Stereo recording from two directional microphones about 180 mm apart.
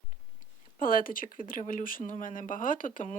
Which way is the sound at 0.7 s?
50° left (ahead or behind).